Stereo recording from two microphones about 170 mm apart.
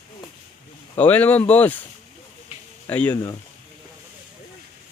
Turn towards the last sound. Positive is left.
turn(degrees=10)  # may be behind; listen again after turning